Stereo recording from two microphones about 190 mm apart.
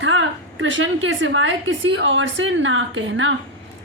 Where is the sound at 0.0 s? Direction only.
90° right.